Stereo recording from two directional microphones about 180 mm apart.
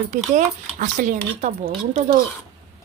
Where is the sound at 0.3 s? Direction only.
45° right (ahead or behind).